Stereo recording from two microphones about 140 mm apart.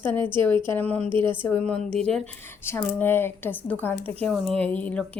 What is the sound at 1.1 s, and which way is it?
Speech, 35° right (ahead or behind).